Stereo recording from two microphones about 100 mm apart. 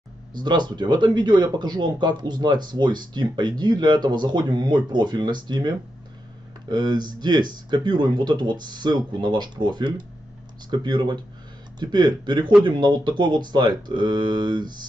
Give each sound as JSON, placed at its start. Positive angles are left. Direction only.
{"t": 0.3, "sound": "speech", "side_deg": -45}